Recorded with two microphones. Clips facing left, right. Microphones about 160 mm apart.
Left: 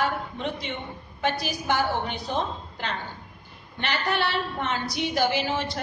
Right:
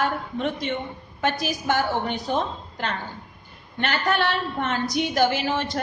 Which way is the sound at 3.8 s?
50° right (ahead or behind).